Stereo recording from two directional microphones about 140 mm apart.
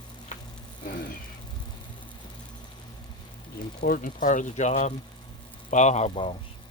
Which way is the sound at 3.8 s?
85° left.